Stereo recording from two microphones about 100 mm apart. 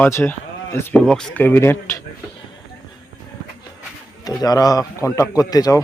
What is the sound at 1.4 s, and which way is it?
Speech, 25° left (ahead or behind).